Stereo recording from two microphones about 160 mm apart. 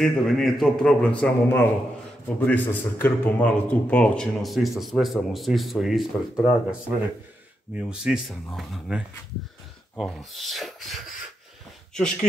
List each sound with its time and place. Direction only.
0.0 s a man's voice: centre (ahead or behind)